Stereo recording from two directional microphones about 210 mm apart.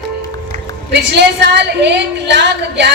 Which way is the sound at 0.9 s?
55° right (ahead or behind).